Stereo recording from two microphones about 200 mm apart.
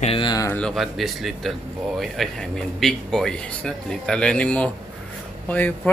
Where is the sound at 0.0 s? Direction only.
25° left (ahead or behind).